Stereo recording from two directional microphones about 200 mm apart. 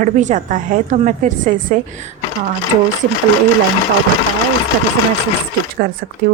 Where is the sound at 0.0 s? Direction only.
40° right (ahead or behind).